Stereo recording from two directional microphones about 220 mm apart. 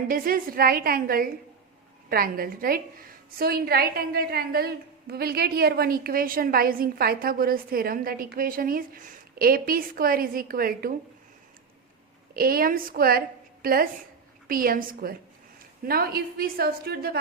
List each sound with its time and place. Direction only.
0.1 s a woman's voice: 40° right (ahead or behind)
12.3 s a woman's voice: 40° right (ahead or behind)